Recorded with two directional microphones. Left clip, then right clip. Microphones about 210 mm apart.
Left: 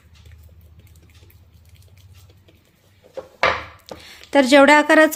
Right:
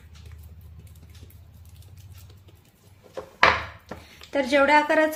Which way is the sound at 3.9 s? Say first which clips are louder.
Left 12 dB; 60° left (ahead or behind).